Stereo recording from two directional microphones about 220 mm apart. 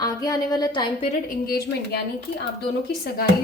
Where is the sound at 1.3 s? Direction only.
45° left (ahead or behind).